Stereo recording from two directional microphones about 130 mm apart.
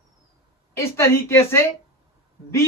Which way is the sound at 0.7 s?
20° left (ahead or behind).